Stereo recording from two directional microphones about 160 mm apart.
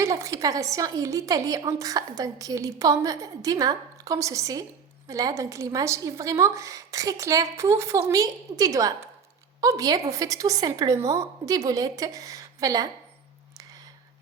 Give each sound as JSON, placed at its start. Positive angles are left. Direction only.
{"t": 0.0, "sound": "a woman's voice", "side_deg": -20}